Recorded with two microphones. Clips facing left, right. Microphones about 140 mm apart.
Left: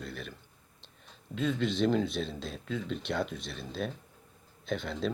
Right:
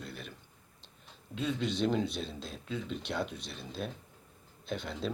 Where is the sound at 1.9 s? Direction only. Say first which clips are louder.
Left 3 dB; centre (ahead or behind).